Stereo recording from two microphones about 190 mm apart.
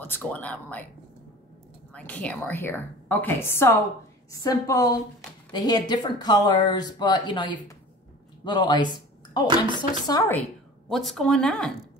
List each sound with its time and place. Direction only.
0.0 s a woman's voice: 10° left (ahead or behind)
2.0 s a woman's voice: 10° left (ahead or behind)
10.9 s speech: centre (ahead or behind)